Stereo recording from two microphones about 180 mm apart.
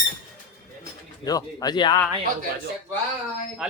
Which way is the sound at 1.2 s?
20° left (ahead or behind).